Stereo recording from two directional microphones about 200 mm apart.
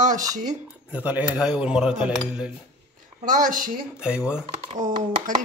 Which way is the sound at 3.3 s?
40° right (ahead or behind).